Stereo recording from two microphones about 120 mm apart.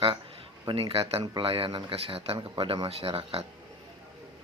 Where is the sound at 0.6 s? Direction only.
50° right (ahead or behind).